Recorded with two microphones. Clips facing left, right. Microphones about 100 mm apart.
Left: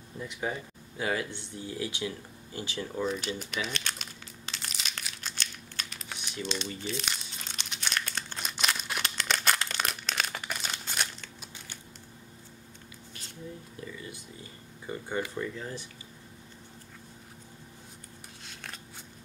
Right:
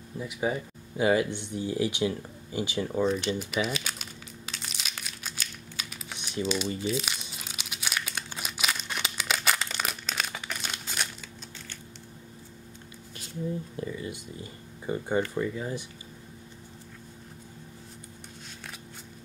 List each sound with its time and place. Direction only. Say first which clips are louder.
0.2 s speech: right 5 dB; 10° right (ahead or behind)
3.1 s crumpling: right 5 dB; centre (ahead or behind)
6.4 s speech: right 6 dB; 10° right (ahead or behind)
6.8 s crumpling: right 5 dB; 5° right (ahead or behind)
14.9 s speech: right 6 dB; 25° right (ahead or behind)
15.3 s speech: right 5 dB; 10° right (ahead or behind)
18.5 s scissors: left 1 dB; centre (ahead or behind)